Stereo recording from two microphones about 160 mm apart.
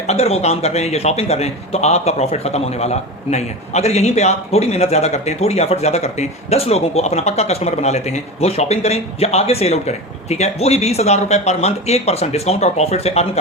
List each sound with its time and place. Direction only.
0.1 s a man's voice: 40° left (ahead or behind)